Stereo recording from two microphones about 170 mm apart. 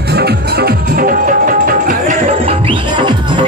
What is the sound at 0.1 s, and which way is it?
Music, 70° right (ahead or behind).